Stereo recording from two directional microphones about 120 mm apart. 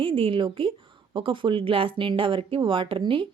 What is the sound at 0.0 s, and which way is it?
Speech, 45° right (ahead or behind).